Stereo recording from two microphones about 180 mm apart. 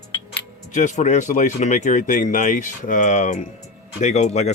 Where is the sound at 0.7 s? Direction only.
45° left (ahead or behind).